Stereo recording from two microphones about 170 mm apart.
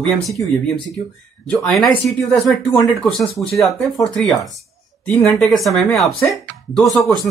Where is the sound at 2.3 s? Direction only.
5° left (ahead or behind).